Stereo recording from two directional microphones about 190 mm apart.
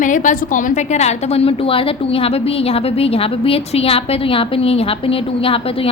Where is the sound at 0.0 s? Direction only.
45° left (ahead or behind).